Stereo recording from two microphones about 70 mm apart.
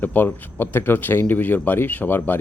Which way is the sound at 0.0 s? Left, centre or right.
Left.